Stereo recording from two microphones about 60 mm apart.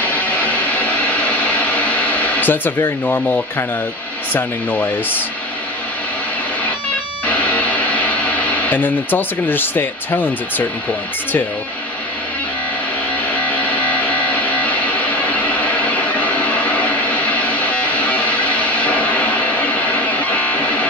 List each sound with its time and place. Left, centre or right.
1.9 s a sound: left
3.1 s speech: left
7.2 s music: left
8.6 s speech: left
13.6 s music: left